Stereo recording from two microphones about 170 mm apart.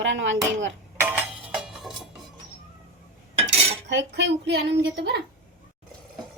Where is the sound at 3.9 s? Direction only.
90° right.